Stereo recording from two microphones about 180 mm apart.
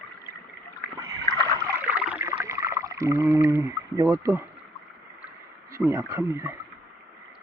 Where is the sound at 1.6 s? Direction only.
10° right (ahead or behind).